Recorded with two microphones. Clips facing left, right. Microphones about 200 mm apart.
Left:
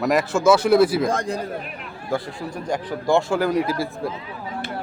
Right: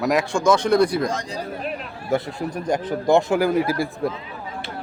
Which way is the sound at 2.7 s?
20° right (ahead or behind).